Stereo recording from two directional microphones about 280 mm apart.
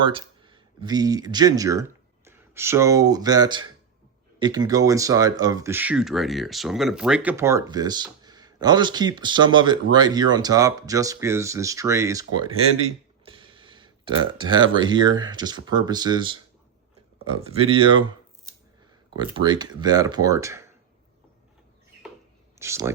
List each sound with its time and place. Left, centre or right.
0.0 s speech: centre
12.8 s a sound: centre
14.8 s speech: centre
19.1 s speech: centre
22.5 s speech: centre